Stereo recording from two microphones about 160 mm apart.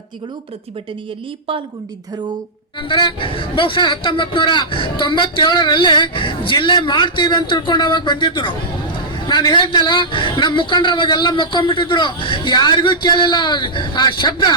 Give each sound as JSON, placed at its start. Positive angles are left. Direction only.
{"t": 2.9, "sound": "a man's voice", "side_deg": 30}